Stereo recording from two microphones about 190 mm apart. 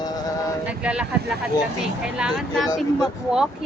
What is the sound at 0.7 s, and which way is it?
Speech, 5° right (ahead or behind).